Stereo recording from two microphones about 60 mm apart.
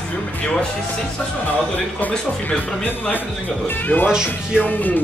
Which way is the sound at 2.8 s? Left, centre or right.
Left.